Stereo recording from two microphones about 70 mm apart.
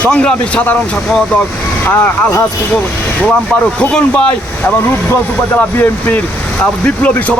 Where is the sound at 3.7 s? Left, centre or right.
Centre.